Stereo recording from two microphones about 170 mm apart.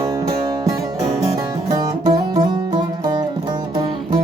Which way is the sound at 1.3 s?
25° right (ahead or behind).